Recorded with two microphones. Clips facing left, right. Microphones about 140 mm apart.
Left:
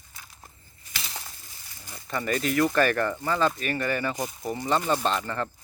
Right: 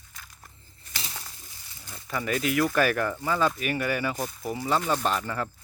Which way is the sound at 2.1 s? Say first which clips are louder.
Even; centre (ahead or behind).